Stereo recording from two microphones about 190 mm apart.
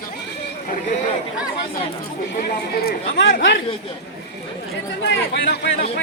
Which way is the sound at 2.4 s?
55° left (ahead or behind).